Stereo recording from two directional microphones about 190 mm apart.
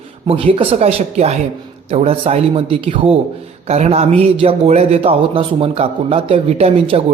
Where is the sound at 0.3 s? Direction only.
30° right (ahead or behind).